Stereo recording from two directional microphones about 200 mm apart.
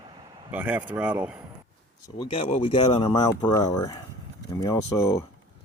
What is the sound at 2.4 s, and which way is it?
Speech, 30° left (ahead or behind).